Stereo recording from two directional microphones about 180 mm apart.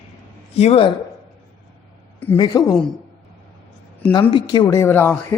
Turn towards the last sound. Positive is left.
turn(degrees=10)  # may be behind; listen again after turning